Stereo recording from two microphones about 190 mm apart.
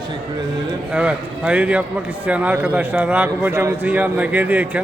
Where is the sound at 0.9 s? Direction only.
5° right (ahead or behind).